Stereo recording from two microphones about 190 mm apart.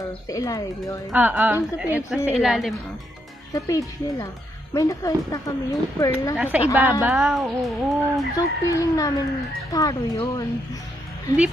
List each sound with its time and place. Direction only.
0.3 s a woman's voice: 20° left (ahead or behind)
1.1 s a woman's voice: 10° right (ahead or behind)
3.5 s a woman's voice: 15° left (ahead or behind)
6.3 s a woman's voice: 5° right (ahead or behind)
8.4 s a woman's voice: 15° left (ahead or behind)